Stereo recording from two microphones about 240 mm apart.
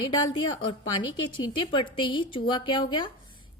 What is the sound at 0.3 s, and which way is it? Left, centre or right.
A woman's voice, centre.